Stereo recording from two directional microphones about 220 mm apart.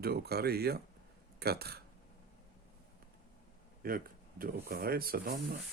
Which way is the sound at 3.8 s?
40° right (ahead or behind).